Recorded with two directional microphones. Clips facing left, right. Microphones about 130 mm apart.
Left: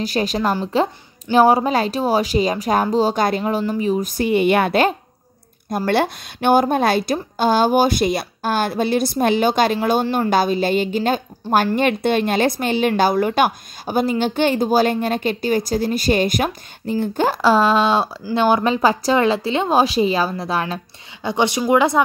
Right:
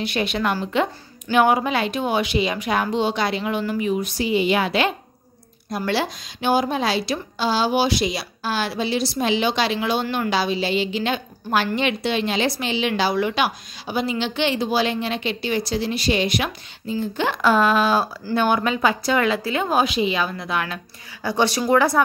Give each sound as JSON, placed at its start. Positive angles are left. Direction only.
{"t": 0.0, "sound": "a woman's voice", "side_deg": 40}
{"t": 17.2, "sound": "a woman's voice", "side_deg": 35}